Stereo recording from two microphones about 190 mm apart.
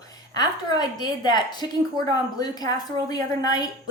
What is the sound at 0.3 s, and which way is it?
A woman's voice, 20° left (ahead or behind).